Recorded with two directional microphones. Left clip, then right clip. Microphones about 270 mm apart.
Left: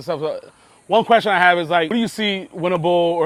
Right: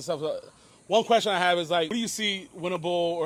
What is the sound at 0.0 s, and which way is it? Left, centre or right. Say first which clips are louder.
A man's voice: left 6 dB; left.